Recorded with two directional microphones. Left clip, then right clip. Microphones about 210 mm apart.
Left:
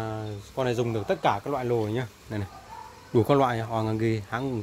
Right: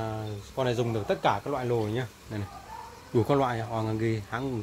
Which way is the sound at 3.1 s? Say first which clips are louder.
Left 3 dB; 45° left (ahead or behind).